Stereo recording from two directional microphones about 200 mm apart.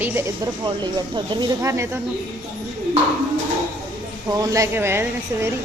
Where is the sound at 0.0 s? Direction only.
10° right (ahead or behind).